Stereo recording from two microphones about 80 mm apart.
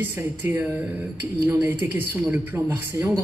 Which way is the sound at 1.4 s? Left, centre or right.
Right.